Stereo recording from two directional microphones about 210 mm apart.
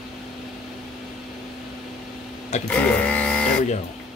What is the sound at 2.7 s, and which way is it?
Printer, 5° left (ahead or behind).